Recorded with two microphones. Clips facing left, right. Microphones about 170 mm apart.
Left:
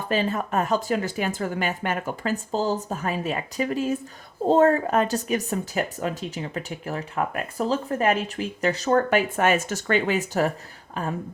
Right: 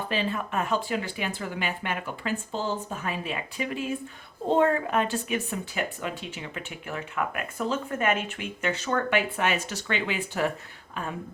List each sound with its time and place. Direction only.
0.1 s speech: 45° left (ahead or behind)